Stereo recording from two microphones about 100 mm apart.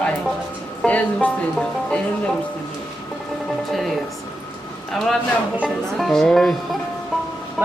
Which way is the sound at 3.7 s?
Centre (ahead or behind).